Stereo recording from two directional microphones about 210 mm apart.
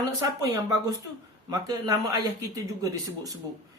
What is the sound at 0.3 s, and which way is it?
Speech, 15° right (ahead or behind).